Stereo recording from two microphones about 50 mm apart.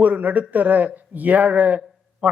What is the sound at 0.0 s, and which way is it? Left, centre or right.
A man's voice, right.